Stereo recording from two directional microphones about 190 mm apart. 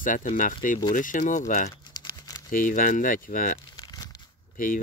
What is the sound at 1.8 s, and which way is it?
Crumpling, 20° left (ahead or behind).